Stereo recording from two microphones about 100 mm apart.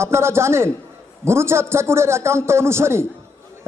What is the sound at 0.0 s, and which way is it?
A man's voice, 25° right (ahead or behind).